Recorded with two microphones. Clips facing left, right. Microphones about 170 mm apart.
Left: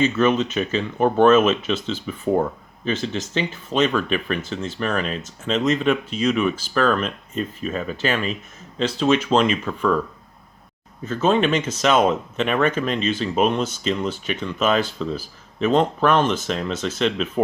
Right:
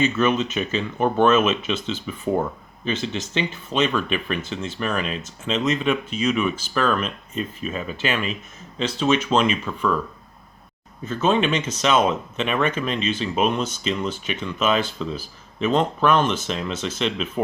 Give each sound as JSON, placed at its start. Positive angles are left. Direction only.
{"t": 0.0, "sound": "speech", "side_deg": 35}
{"t": 11.1, "sound": "speech", "side_deg": 40}